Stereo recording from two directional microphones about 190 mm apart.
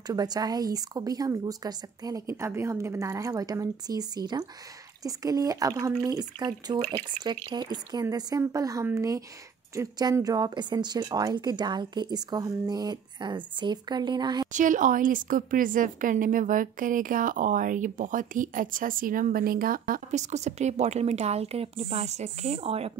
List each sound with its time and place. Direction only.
0.0 s a woman's voice: 20° right (ahead or behind)
14.5 s a woman's voice: 45° right (ahead or behind)